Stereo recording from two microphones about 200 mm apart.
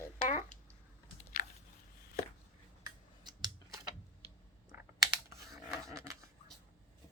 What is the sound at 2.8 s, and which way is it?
Scissors, 20° right (ahead or behind).